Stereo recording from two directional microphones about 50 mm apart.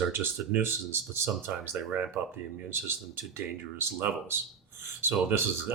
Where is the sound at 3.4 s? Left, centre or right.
Right.